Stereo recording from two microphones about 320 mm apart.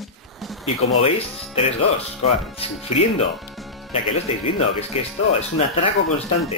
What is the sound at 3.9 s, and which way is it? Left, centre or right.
Speech, centre.